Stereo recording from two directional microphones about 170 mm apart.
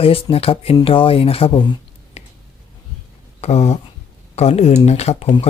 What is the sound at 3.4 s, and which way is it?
Speech, 40° left (ahead or behind).